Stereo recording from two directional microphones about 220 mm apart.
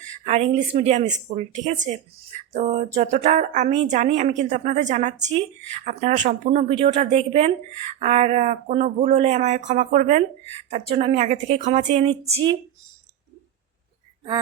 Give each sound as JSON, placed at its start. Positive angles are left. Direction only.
{"t": 0.3, "sound": "a woman's voice", "side_deg": -25}